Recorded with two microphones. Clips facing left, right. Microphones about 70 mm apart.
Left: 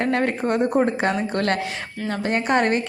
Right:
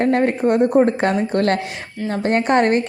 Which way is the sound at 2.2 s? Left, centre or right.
Right.